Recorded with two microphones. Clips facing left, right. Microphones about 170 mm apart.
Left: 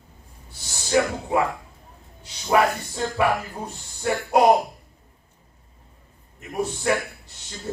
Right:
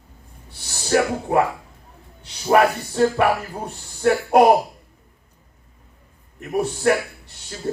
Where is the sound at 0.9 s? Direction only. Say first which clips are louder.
Right 3 dB; 55° right (ahead or behind).